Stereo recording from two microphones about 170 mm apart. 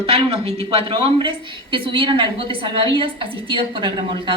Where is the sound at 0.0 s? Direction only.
35° right (ahead or behind).